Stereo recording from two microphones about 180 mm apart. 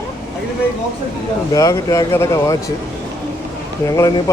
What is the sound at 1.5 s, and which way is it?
Speech, 20° left (ahead or behind).